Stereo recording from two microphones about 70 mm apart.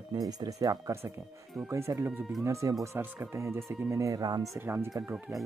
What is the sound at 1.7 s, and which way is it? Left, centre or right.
Speech, right.